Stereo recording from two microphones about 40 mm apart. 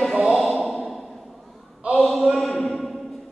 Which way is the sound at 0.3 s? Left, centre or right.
Centre.